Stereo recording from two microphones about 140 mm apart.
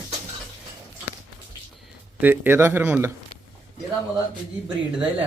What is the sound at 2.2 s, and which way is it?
Speech, 15° right (ahead or behind).